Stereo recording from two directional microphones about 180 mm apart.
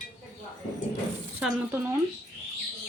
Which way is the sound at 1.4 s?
10° right (ahead or behind).